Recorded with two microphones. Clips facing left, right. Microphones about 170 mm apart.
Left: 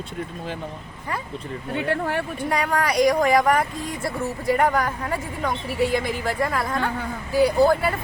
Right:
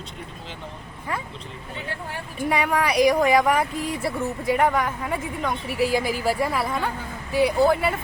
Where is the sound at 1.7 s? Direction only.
65° left (ahead or behind).